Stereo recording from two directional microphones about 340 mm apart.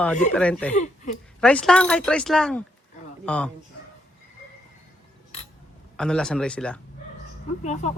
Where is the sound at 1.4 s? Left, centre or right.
Centre.